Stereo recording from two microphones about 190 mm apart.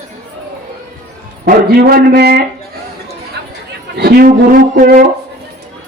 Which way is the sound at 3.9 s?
55° right (ahead or behind).